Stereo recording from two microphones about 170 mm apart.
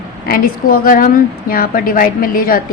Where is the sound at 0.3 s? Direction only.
55° left (ahead or behind).